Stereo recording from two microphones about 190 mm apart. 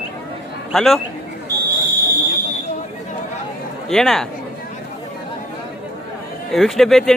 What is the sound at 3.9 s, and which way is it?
Speech, centre (ahead or behind).